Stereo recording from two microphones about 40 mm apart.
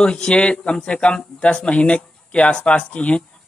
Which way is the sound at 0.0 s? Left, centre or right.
Left.